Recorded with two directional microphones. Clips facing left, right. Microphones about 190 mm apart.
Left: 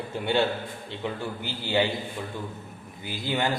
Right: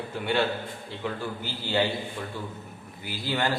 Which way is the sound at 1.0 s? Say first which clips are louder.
Even; 20° left (ahead or behind).